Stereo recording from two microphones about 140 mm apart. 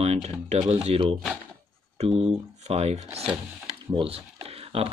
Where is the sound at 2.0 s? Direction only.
50° right (ahead or behind).